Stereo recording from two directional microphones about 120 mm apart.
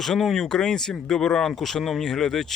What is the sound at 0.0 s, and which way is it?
Speech, centre (ahead or behind).